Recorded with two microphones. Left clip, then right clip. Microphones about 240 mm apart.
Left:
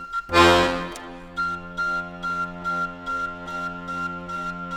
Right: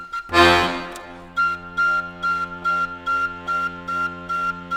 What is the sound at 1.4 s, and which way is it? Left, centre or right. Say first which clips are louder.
Music: right 6 dB; right.